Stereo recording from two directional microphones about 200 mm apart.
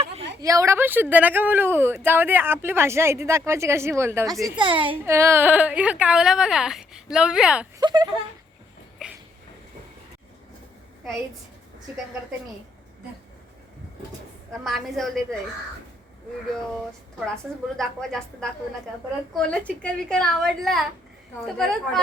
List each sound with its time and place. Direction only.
0.4 s speech: 15° right (ahead or behind)
4.5 s a child's voice: 25° right (ahead or behind)
5.0 s a woman's voice: 15° right (ahead or behind)
7.8 s speech: 20° right (ahead or behind)
9.0 s a sound: 5° right (ahead or behind)
14.6 s a woman's voice: centre (ahead or behind)
17.7 s a woman's voice: centre (ahead or behind)